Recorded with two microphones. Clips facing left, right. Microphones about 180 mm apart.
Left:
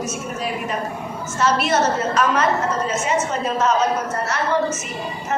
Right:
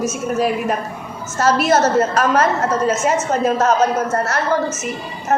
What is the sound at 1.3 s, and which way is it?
A woman's voice, 45° right (ahead or behind).